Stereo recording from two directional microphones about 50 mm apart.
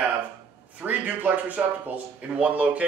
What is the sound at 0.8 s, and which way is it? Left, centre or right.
Speech, right.